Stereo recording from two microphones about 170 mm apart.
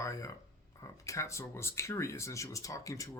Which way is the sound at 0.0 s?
20° left (ahead or behind).